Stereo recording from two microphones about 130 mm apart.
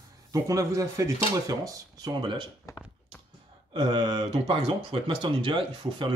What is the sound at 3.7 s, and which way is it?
Speech, 35° right (ahead or behind).